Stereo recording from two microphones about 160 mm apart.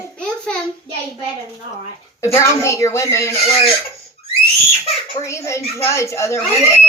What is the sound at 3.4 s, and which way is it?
Speech, 40° left (ahead or behind).